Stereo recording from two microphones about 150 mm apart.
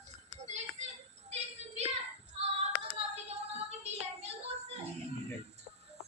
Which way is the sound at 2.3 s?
40° right (ahead or behind).